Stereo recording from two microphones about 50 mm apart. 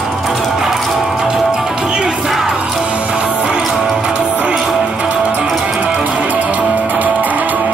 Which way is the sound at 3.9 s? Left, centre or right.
Right.